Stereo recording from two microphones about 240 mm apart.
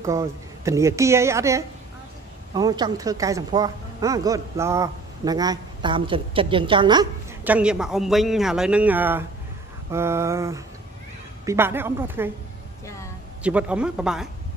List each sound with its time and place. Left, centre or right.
0.0 s speech: centre
7.4 s a man's voice: centre
13.4 s a man's voice: centre